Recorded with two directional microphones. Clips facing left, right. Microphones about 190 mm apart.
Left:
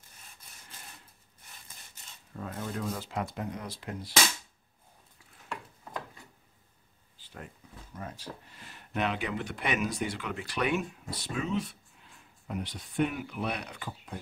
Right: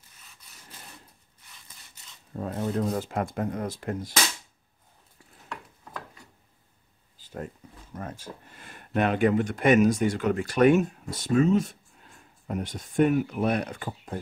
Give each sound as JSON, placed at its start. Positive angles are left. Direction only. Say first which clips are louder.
{"t": 2.3, "sound": "speech", "louder": "right 8 dB", "side_deg": -35}
{"t": 7.2, "sound": "a sound", "louder": "right 9 dB", "side_deg": -45}
{"t": 7.9, "sound": "speech", "louder": "right 4 dB", "side_deg": -50}